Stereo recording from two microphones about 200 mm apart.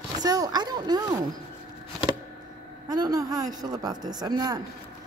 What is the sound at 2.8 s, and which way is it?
A woman's voice, 20° right (ahead or behind).